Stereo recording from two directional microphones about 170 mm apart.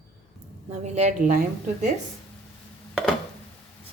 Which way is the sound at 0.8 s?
40° right (ahead or behind).